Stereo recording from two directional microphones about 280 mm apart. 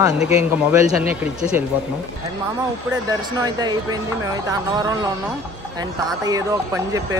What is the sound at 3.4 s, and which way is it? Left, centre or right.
Speech, centre.